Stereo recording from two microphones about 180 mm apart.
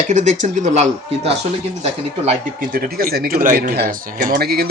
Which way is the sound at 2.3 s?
55° right (ahead or behind).